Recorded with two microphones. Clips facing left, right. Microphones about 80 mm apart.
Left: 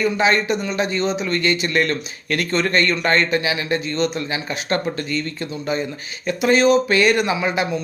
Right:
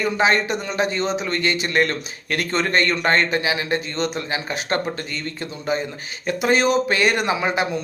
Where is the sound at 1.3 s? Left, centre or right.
Right.